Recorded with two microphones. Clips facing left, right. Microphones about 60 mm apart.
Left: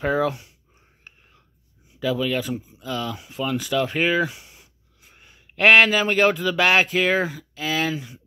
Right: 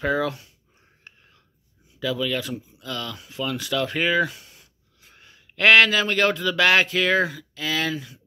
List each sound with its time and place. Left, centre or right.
0.0 s speech: centre
2.0 s speech: centre